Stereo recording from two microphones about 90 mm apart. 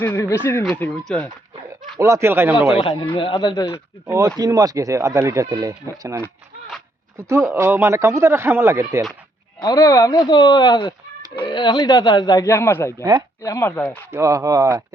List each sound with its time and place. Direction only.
0.0 s speech: 30° left (ahead or behind)
0.8 s speech: 10° left (ahead or behind)
2.0 s speech: 30° right (ahead or behind)
2.8 s speech: 60° left (ahead or behind)
4.0 s speech: 30° right (ahead or behind)
4.4 s speech: 45° right (ahead or behind)
9.7 s speech: 40° left (ahead or behind)
11.3 s speech: 55° left (ahead or behind)
12.5 s speech: 30° left (ahead or behind)
13.0 s speech: 45° right (ahead or behind)
13.4 s speech: 35° left (ahead or behind)
14.1 s speech: 35° right (ahead or behind)